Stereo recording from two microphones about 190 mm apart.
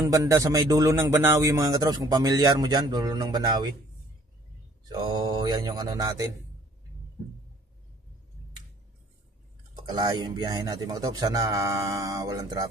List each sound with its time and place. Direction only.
0.0 s speech: 15° right (ahead or behind)
4.8 s speech: 20° right (ahead or behind)
9.8 s speech: 20° right (ahead or behind)